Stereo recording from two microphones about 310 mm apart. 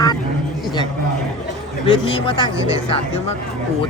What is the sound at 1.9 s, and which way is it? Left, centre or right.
Speech, centre.